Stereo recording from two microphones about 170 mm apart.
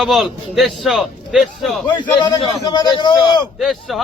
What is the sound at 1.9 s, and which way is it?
A man's voice, 25° left (ahead or behind).